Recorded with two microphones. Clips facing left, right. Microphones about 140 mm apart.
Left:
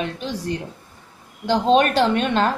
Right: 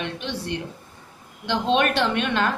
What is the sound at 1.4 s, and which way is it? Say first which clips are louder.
A woman's voice: left 5 dB; 35° left (ahead or behind).